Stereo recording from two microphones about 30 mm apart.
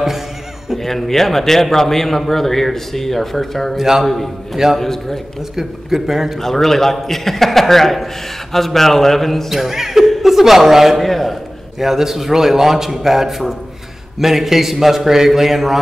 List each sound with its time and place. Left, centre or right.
0.8 s a man's voice: centre
3.7 s a man's voice: centre
4.0 s a man's voice: centre
5.6 s a man's voice: centre
6.4 s a man's voice: centre
9.5 s speech: centre
10.0 s chuckle: centre
11.0 s a man's voice: centre
11.8 s a man's voice: centre